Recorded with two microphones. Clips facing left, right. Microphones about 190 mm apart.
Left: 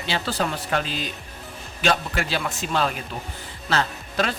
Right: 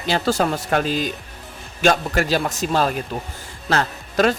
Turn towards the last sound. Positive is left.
turn(degrees=-45)  # may be behind; listen again after turning